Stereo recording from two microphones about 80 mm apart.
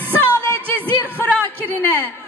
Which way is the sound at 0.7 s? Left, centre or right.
Left.